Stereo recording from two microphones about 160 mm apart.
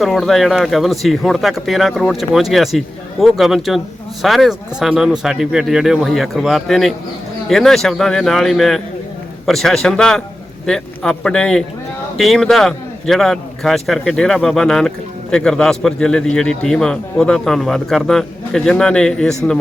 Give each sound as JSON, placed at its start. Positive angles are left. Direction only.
{"t": 0.0, "sound": "a man's voice", "side_deg": 0}